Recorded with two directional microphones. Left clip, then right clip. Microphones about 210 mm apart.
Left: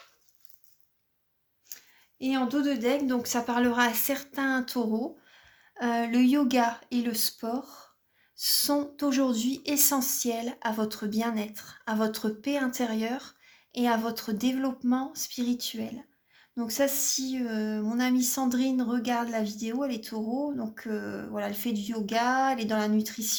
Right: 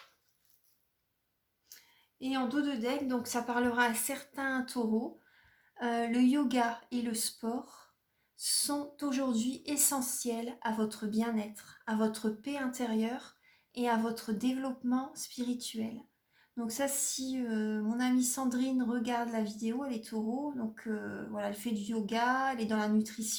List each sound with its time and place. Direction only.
2.1 s speech: 50° left (ahead or behind)